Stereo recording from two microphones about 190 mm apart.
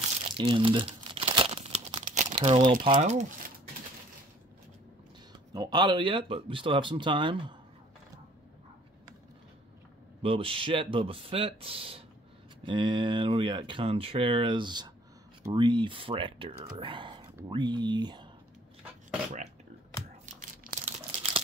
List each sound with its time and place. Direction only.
0.4 s crumpling: 25° right (ahead or behind)
2.8 s speech: 25° right (ahead or behind)
5.5 s speech: 25° right (ahead or behind)
10.2 s speech: 30° right (ahead or behind)
20.3 s crumpling: 40° right (ahead or behind)